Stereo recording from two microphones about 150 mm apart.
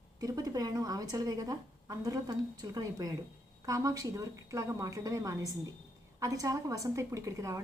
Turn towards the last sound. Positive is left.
turn(degrees=-20)  # may be behind; listen again after turning